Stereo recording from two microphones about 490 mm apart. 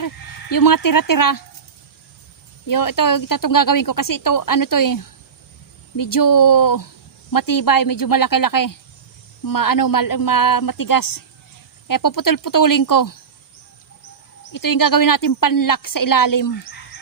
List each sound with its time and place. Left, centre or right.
0.5 s a woman's voice: left
2.6 s a woman's voice: left
14.5 s a woman's voice: left